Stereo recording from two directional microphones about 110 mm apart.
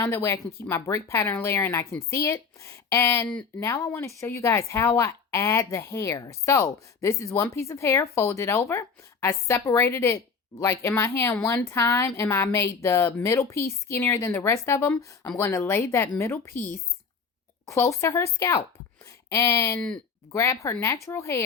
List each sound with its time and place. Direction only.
0.0 s speech: 25° left (ahead or behind)
17.7 s speech: 25° left (ahead or behind)